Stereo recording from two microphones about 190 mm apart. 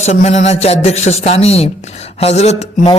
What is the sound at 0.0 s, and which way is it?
Speech, 35° left (ahead or behind).